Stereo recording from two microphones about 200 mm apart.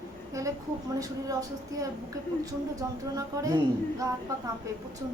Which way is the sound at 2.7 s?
15° right (ahead or behind).